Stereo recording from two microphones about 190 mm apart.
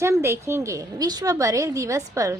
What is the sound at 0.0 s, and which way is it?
A woman's voice, 15° right (ahead or behind).